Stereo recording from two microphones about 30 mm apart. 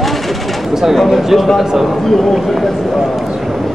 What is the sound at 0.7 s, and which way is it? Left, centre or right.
Bird, centre.